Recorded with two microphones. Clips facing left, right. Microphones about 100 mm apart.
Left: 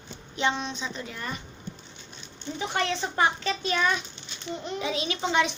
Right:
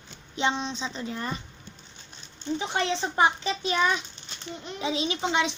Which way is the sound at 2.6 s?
25° right (ahead or behind).